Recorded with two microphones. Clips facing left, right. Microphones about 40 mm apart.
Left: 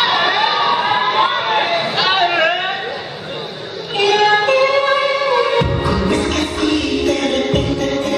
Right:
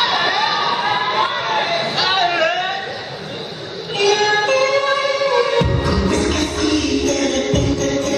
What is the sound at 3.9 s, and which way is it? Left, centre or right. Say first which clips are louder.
Music: left 2 dB; centre.